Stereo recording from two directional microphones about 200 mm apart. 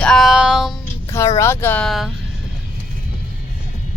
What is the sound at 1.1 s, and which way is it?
Speech, 15° left (ahead or behind).